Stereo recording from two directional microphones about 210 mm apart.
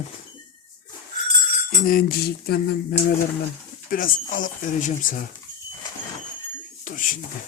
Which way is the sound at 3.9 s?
40° left (ahead or behind).